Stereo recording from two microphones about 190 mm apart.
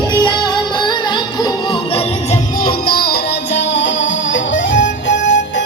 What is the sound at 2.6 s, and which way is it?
Music, 55° left (ahead or behind).